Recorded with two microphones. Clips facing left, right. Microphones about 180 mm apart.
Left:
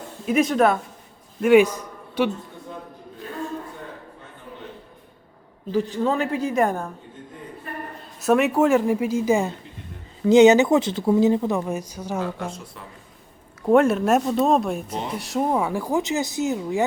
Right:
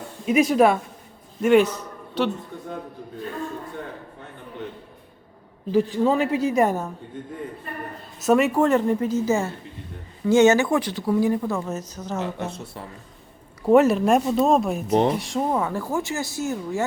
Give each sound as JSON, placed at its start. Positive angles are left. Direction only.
{"t": 0.3, "sound": "a man's voice", "side_deg": 0}
{"t": 5.7, "sound": "speech", "side_deg": -10}
{"t": 8.2, "sound": "speech", "side_deg": 0}
{"t": 13.6, "sound": "speech", "side_deg": 0}
{"t": 14.8, "sound": "speech", "side_deg": -70}
{"t": 15.2, "sound": "speech", "side_deg": 5}